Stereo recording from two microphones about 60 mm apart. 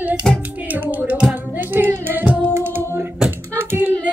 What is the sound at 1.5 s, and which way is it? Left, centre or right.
Singing, right.